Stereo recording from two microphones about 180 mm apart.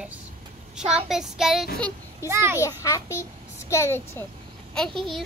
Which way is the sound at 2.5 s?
15° left (ahead or behind).